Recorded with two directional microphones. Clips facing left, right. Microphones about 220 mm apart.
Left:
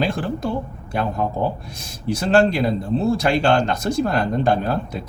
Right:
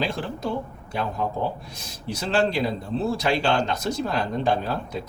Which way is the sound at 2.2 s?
50° left (ahead or behind).